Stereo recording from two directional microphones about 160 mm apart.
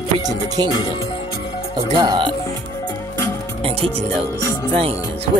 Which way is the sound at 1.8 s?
25° right (ahead or behind).